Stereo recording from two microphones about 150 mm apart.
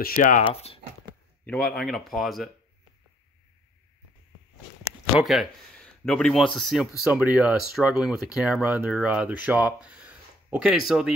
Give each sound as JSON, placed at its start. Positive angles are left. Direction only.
{"t": 0.0, "sound": "speech", "side_deg": 70}
{"t": 0.5, "sound": "speech", "side_deg": 40}
{"t": 1.4, "sound": "speech", "side_deg": 5}
{"t": 5.2, "sound": "speech", "side_deg": 0}